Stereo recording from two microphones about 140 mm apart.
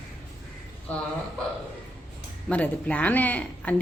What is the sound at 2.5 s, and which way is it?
Speech, 10° left (ahead or behind).